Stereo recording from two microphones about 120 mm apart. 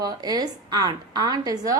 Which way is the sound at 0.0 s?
35° right (ahead or behind).